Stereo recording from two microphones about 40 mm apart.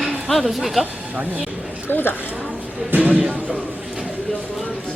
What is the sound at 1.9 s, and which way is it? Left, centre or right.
Speech, left.